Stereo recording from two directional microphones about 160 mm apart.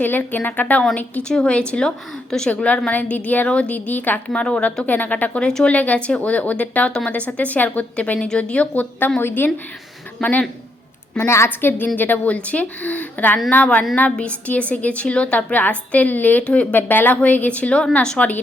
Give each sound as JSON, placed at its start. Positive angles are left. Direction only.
{"t": 0.0, "sound": "a woman's voice", "side_deg": 10}